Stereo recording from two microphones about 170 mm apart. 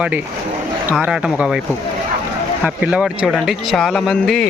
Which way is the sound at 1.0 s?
5° right (ahead or behind).